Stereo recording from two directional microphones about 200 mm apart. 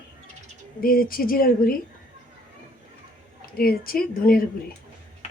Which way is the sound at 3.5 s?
45° left (ahead or behind).